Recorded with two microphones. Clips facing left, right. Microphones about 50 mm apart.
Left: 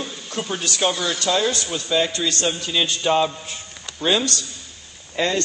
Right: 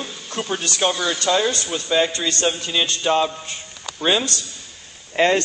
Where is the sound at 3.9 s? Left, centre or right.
Centre.